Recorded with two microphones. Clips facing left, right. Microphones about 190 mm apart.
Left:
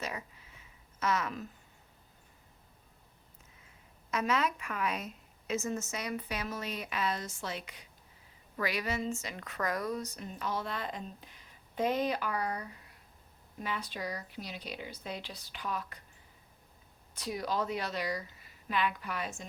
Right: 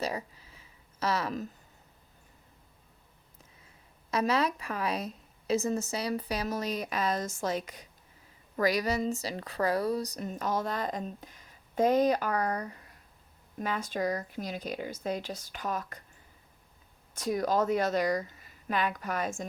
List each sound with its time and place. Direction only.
0.0 s a sound: 35° right (ahead or behind)
4.1 s speech: 35° right (ahead or behind)
17.2 s speech: 45° right (ahead or behind)